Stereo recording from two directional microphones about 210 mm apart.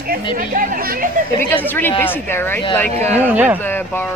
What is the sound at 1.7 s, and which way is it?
Speech, 10° left (ahead or behind).